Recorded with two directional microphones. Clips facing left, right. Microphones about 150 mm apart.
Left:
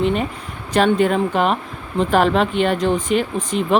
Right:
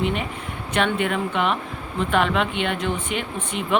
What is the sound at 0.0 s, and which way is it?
Speech, 35° left (ahead or behind).